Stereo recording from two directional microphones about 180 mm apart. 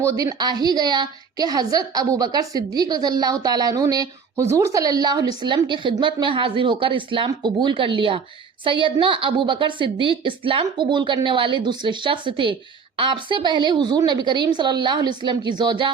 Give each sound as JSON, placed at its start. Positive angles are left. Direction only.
{"t": 0.0, "sound": "a woman's voice", "side_deg": -20}